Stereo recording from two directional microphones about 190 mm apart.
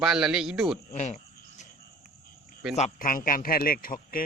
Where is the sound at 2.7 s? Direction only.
40° left (ahead or behind).